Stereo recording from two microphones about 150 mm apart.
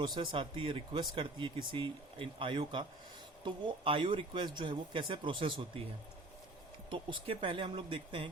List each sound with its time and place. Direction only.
0.0 s speech: 30° right (ahead or behind)
6.9 s speech: 35° right (ahead or behind)